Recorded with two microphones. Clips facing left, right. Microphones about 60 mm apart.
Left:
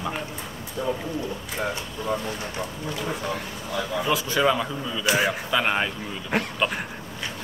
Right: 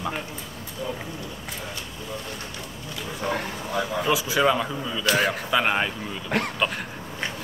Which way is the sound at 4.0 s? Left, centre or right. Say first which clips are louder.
Even; centre.